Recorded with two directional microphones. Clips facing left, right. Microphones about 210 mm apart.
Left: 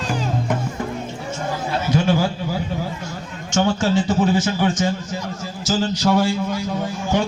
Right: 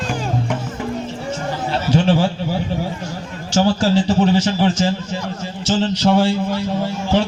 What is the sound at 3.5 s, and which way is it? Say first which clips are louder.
A man's voice: right 3 dB; 35° right (ahead or behind).